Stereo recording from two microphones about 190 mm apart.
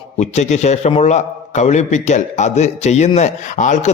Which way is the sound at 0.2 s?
40° left (ahead or behind).